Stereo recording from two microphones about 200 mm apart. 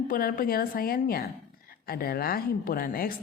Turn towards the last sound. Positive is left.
turn(degrees=45)  # may be behind; listen again after turning